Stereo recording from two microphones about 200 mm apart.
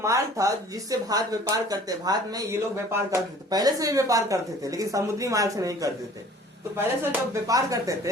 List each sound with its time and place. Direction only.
0.0 s speech: 15° right (ahead or behind)